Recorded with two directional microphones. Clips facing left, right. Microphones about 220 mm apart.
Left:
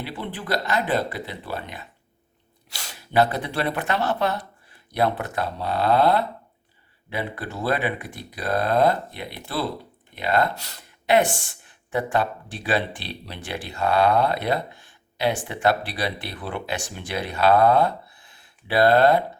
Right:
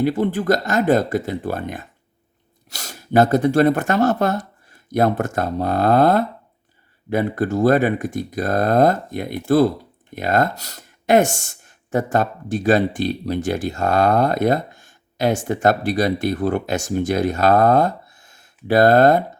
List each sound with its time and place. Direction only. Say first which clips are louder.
0.0 s speech: right 13 dB; 45° right (ahead or behind)